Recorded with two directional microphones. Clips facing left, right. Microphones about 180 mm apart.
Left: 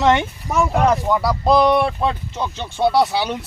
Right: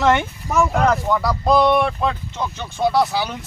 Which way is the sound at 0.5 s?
5° left (ahead or behind).